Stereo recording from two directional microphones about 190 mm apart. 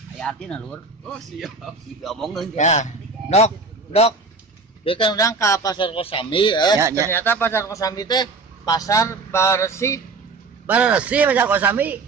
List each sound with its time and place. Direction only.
0.2 s speech: 5° left (ahead or behind)
2.0 s speech: centre (ahead or behind)
2.5 s a man's voice: 40° left (ahead or behind); by 6.8 s 25° left (ahead or behind)
6.8 s speech: 15° right (ahead or behind)
7.1 s a man's voice: 10° left (ahead or behind)
10.7 s speech: 5° right (ahead or behind)